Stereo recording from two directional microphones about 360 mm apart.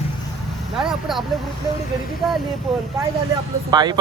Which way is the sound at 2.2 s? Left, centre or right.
Centre.